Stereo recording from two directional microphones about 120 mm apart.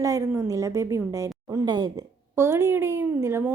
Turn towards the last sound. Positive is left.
turn(degrees=-20)  # may be behind; listen again after turning